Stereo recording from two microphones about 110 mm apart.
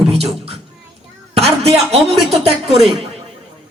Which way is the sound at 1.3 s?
70° right (ahead or behind).